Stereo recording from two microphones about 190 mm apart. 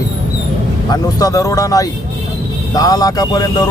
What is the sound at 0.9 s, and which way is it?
Speech, 20° left (ahead or behind).